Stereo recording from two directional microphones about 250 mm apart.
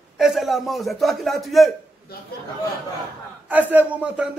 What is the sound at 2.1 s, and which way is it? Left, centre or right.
Speech, left.